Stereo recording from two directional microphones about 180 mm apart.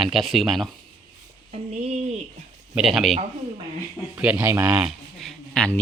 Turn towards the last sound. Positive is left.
turn(degrees=5)  # may be behind; listen again after turning